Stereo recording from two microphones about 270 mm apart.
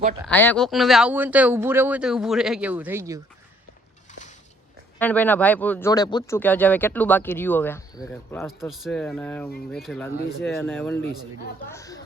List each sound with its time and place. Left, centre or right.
0.3 s speech: centre
4.9 s speech: centre